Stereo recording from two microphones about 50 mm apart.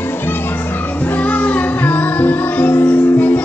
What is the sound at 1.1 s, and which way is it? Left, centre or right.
Music, left.